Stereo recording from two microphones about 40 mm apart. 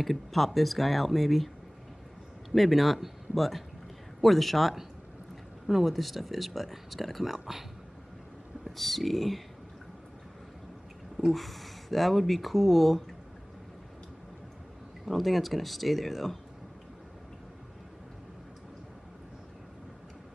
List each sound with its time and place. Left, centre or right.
0.0 s speech: centre
2.5 s speech: centre
8.6 s speech: centre
11.1 s speech: centre
15.0 s speech: centre